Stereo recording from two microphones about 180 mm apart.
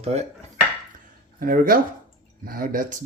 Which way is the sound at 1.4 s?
50° right (ahead or behind).